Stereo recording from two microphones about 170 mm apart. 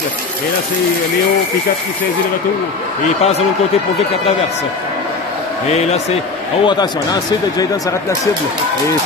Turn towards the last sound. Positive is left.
turn(degrees=25)  # may be behind; listen again after turning